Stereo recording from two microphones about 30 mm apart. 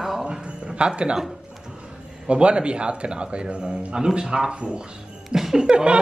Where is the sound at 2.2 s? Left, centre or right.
Right.